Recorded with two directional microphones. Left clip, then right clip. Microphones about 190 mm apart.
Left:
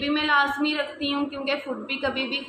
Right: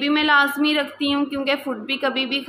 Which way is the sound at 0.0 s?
45° right (ahead or behind).